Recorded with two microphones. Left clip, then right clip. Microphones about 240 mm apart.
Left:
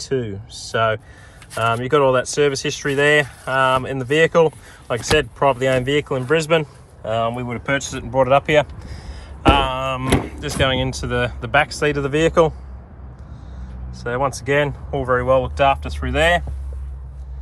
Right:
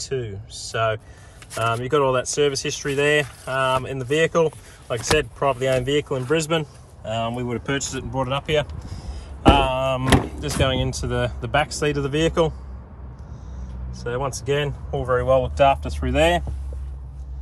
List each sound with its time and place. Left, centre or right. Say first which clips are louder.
0.0 s speech: left 5 dB; centre
13.9 s speech: left 5 dB; centre